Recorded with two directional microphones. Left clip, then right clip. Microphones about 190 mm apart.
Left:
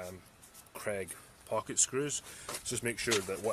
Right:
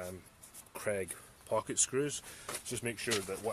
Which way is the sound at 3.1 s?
30° left (ahead or behind).